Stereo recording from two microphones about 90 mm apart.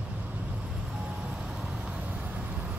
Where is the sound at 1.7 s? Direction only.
10° right (ahead or behind).